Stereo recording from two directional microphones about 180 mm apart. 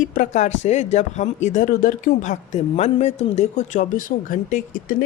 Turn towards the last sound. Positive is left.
turn(degrees=50)  # may be behind; listen again after turning